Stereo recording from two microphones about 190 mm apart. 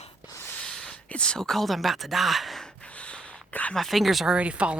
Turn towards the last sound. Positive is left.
turn(degrees=-5)  # may be behind; listen again after turning